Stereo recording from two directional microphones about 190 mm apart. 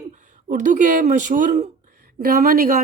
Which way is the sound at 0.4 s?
40° right (ahead or behind).